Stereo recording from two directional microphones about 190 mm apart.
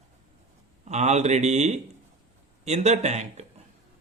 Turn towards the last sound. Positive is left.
turn(degrees=-35)  # may be behind; listen again after turning